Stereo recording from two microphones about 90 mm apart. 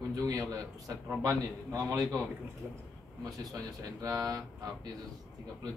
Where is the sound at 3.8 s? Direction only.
45° right (ahead or behind).